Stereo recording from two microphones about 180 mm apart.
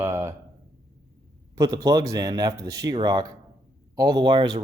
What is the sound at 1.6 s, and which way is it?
Speech, 20° right (ahead or behind).